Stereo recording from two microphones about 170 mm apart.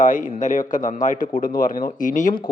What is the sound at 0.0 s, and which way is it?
A man's voice, 50° left (ahead or behind).